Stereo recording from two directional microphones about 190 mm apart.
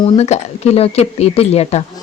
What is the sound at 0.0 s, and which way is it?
Speech, 35° left (ahead or behind).